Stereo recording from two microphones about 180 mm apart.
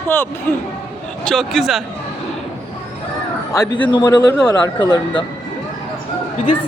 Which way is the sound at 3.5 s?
20° left (ahead or behind).